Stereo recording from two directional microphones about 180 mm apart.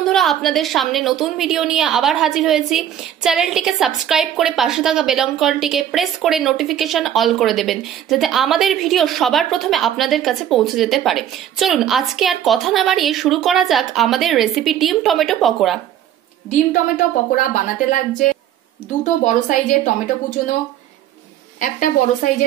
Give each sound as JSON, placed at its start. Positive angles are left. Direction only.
{"t": 0.0, "sound": "a woman's voice", "side_deg": 0}
{"t": 16.4, "sound": "a woman's voice", "side_deg": 45}
{"t": 19.0, "sound": "a woman's voice", "side_deg": 45}
{"t": 21.5, "sound": "a woman's voice", "side_deg": 50}